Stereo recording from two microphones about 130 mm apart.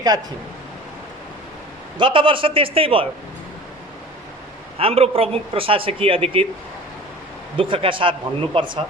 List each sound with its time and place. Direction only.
2.0 s speech: 40° right (ahead or behind)
4.8 s speech: 50° right (ahead or behind)
7.5 s speech: 45° right (ahead or behind)